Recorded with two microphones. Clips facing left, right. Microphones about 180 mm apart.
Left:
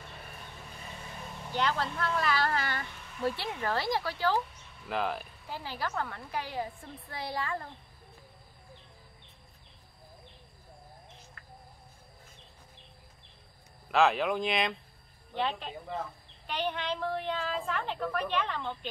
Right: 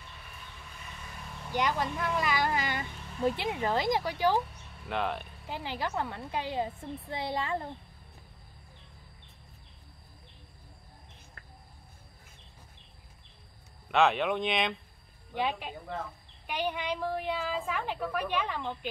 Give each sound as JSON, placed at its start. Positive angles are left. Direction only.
{"t": 1.5, "sound": "speech", "side_deg": -15}
{"t": 4.8, "sound": "speech", "side_deg": 0}
{"t": 5.5, "sound": "a woman's voice", "side_deg": -20}
{"t": 13.8, "sound": "speech", "side_deg": 0}
{"t": 15.3, "sound": "speech", "side_deg": -10}